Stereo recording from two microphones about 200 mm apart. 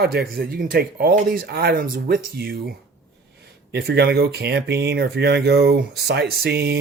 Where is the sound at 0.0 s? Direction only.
50° right (ahead or behind).